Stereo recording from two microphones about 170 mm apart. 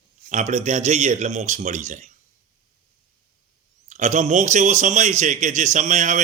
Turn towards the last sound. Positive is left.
turn(degrees=-45)  # may be behind; listen again after turning